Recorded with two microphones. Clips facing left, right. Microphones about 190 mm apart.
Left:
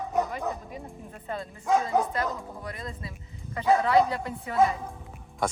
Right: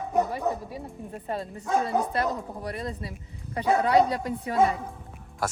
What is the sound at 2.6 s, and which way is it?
Speech, 35° right (ahead or behind).